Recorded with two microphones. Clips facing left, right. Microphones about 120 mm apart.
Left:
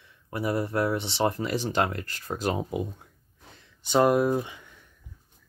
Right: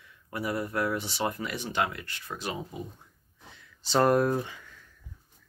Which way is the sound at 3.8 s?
15° left (ahead or behind).